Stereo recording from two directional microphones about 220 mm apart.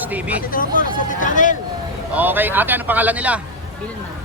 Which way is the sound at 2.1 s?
10° right (ahead or behind).